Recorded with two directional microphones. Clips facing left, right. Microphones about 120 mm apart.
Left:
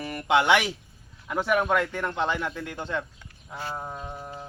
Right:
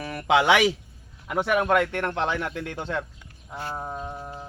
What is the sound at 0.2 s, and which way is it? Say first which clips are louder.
Speech: right 1 dB; 90° right.